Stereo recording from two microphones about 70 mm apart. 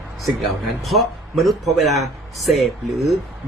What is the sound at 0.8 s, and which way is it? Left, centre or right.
Speech, centre.